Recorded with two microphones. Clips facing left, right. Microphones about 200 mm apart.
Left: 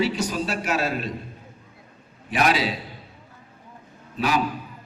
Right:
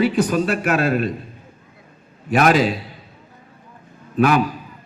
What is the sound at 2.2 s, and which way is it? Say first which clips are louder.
Speech: right 7 dB; 50° right (ahead or behind).